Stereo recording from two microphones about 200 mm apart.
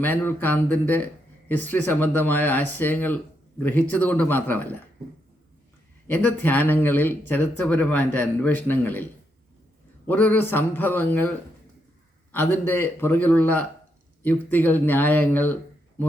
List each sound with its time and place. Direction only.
0.0 s speech: 10° left (ahead or behind)
6.1 s speech: 10° left (ahead or behind)
10.1 s speech: 10° left (ahead or behind)
12.3 s speech: 10° left (ahead or behind)